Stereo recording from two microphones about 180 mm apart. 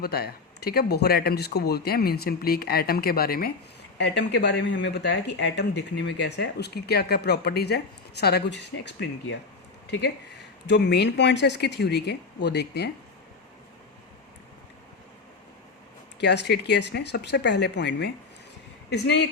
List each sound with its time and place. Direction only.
0.0 s speech: 60° left (ahead or behind)
3.9 s speech: 70° left (ahead or behind)
10.7 s speech: 70° left (ahead or behind)
16.2 s speech: 70° left (ahead or behind)